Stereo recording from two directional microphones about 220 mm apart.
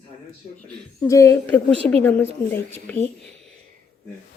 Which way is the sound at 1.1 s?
15° left (ahead or behind).